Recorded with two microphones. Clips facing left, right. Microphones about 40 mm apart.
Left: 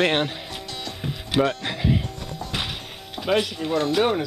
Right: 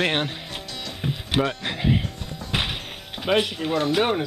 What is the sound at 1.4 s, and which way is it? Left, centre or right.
Speech, centre.